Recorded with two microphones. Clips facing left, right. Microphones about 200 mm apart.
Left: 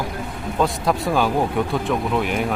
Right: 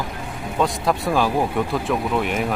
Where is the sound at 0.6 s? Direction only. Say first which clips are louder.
Even; centre (ahead or behind).